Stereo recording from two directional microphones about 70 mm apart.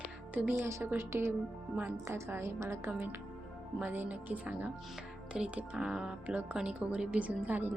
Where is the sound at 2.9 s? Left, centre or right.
Right.